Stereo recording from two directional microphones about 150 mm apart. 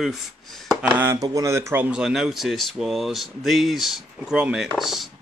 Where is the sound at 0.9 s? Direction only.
20° right (ahead or behind).